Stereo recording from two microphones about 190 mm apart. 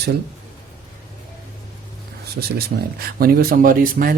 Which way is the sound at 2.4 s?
55° right (ahead or behind).